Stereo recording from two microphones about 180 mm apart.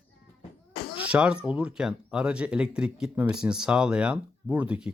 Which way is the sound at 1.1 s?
5° right (ahead or behind).